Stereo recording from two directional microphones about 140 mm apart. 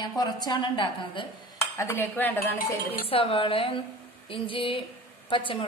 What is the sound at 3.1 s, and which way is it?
A woman's voice, 40° left (ahead or behind).